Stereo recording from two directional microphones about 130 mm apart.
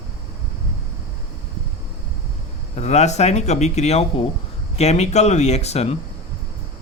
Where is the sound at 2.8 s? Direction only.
60° left (ahead or behind).